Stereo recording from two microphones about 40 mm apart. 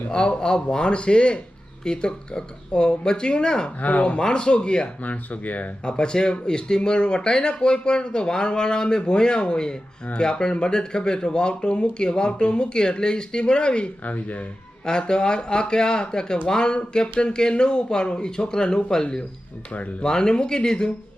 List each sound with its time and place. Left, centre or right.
0.1 s speech: left
3.8 s speech: left
4.2 s speech: left
5.0 s speech: left
5.8 s speech: left
14.0 s speech: left
14.8 s speech: left